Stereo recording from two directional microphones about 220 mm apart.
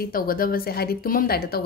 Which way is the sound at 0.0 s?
40° left (ahead or behind).